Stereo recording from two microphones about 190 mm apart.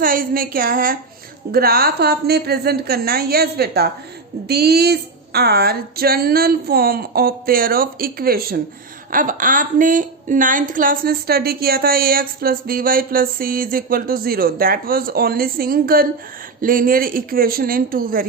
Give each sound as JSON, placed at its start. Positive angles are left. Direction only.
{"t": 0.0, "sound": "a woman's voice", "side_deg": -50}